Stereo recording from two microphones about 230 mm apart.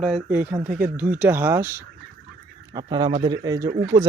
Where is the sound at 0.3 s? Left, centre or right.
Centre.